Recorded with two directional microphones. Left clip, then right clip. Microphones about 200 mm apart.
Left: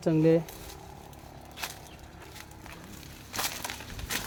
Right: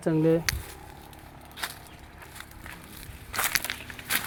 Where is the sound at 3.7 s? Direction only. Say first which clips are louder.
Right 5 dB; 25° right (ahead or behind).